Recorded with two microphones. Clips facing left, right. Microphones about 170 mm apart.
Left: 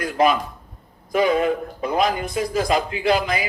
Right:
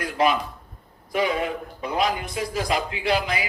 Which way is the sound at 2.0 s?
45° left (ahead or behind).